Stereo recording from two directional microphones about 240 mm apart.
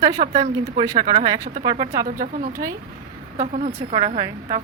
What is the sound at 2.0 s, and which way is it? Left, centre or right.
Speech, right.